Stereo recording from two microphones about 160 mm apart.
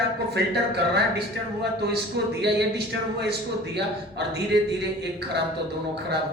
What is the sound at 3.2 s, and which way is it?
Speech, 90° right.